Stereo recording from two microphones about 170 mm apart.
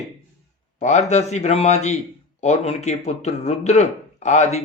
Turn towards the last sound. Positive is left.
turn(degrees=45)  # may be behind; listen again after turning